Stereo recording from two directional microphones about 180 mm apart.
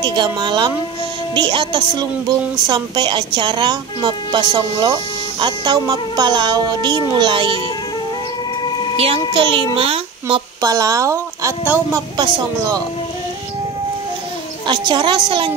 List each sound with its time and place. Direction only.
0.0 s a woman's voice: 25° right (ahead or behind)
8.9 s a child's voice: 35° right (ahead or behind)
14.7 s a woman's voice: 25° right (ahead or behind)